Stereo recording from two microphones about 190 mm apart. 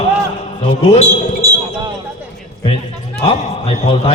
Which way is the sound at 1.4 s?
20° right (ahead or behind).